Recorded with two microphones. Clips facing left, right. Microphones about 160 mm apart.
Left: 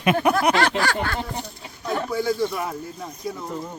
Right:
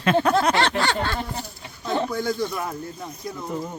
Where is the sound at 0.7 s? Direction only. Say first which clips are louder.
Even; 25° right (ahead or behind).